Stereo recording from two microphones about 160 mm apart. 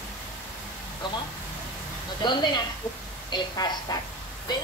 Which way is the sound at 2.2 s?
30° left (ahead or behind).